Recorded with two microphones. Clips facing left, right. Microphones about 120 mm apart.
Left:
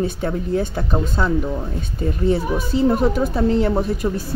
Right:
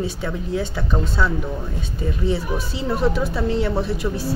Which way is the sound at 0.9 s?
20° left (ahead or behind).